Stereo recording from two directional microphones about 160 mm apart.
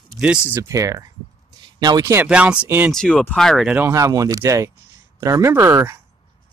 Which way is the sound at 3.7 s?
15° right (ahead or behind).